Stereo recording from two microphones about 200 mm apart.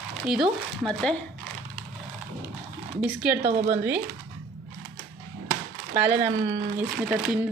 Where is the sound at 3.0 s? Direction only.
5° right (ahead or behind).